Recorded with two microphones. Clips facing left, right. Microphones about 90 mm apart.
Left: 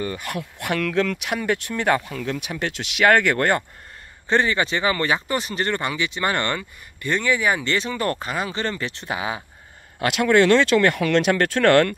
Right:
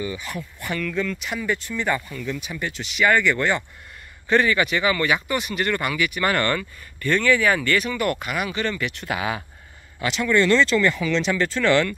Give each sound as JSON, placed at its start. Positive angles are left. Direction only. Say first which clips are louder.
{"t": 0.0, "sound": "speech", "louder": "left 2 dB", "side_deg": 55}
{"t": 4.3, "sound": "speech", "louder": "right 1 dB", "side_deg": 30}
{"t": 9.9, "sound": "speech", "louder": "left 3 dB", "side_deg": 55}